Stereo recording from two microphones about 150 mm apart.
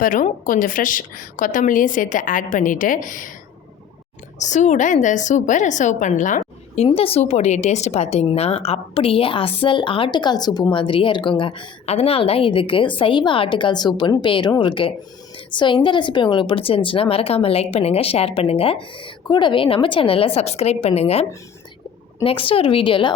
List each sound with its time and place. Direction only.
0.0 s a woman's voice: 65° left (ahead or behind)
4.4 s a woman's voice: 55° left (ahead or behind)
6.8 s a woman's voice: 40° left (ahead or behind)